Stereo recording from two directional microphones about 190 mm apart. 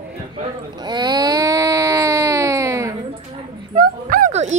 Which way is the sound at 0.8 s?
20° right (ahead or behind).